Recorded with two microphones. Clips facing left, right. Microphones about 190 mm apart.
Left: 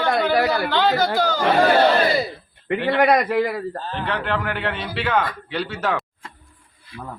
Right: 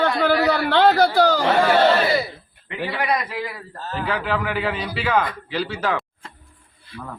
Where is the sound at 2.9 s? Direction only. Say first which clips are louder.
Left 7 dB; 55° left (ahead or behind).